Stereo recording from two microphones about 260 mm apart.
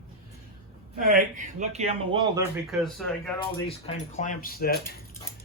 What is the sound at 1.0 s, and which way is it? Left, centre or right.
A man's voice, right.